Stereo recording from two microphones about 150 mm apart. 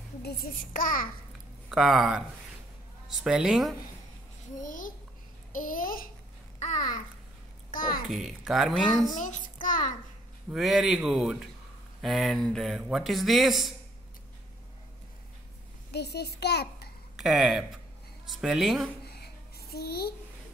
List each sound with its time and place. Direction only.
0.2 s a child's voice: 85° left; by 1.0 s 65° left (ahead or behind)
1.7 s a man's voice: 5° right (ahead or behind)
4.6 s a child's voice: 60° left (ahead or behind)
7.7 s a child's voice: 65° left (ahead or behind)
8.1 s a man's voice: 5° right (ahead or behind)
9.2 s child singing: 60° left (ahead or behind)
10.5 s a man's voice: centre (ahead or behind)
15.9 s a child's voice: 90° left
17.2 s a man's voice: 5° right (ahead or behind)
19.0 s a sound: 90° left